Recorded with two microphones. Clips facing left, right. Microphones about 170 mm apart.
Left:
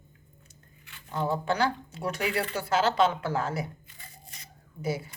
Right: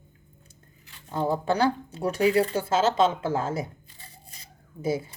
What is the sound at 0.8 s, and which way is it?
Speech, 35° right (ahead or behind).